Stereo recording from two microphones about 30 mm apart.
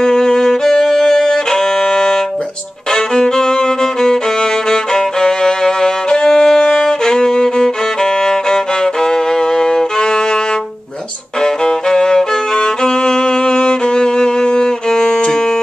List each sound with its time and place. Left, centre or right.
0.0 s violin: left
11.4 s violin: left
14.9 s music: left